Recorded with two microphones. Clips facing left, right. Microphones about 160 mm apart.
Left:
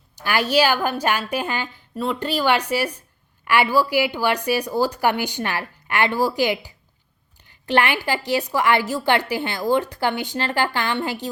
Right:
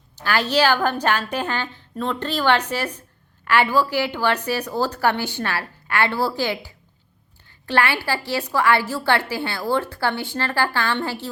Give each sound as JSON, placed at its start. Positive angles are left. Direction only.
{"t": 0.2, "sound": "a woman's voice", "side_deg": 10}
{"t": 7.7, "sound": "a woman's voice", "side_deg": 20}